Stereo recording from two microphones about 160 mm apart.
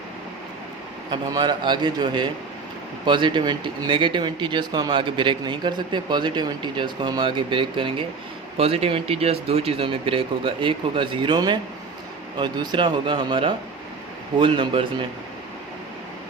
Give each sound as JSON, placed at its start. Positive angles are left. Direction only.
{"t": 1.1, "sound": "speech", "side_deg": -25}